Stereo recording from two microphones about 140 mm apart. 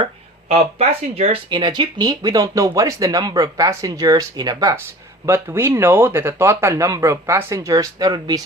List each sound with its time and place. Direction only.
0.0 s speech: 50° right (ahead or behind); by 8.4 s 30° right (ahead or behind)